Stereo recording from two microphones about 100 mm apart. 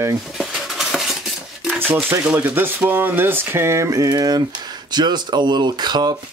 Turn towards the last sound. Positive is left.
turn(degrees=-45)  # may be behind; listen again after turning